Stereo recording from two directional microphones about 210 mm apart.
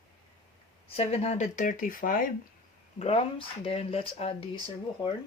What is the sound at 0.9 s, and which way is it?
Speech, 30° left (ahead or behind).